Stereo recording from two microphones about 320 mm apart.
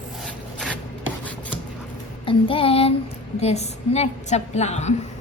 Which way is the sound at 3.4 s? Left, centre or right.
Centre.